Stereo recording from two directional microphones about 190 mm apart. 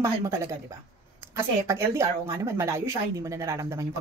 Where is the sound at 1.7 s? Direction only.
15° right (ahead or behind).